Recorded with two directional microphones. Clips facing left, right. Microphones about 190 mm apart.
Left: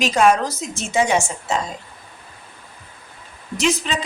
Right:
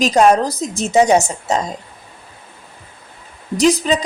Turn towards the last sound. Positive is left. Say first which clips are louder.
# right 7 dB
turn(degrees=-35)  # may be behind; listen again after turning